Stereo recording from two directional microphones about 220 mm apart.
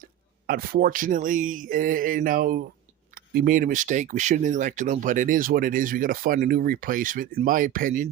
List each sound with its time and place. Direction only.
0.4 s speech: 45° right (ahead or behind)